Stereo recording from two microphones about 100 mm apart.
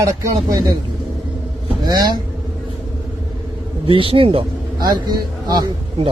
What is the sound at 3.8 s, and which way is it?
Speech, 65° right (ahead or behind).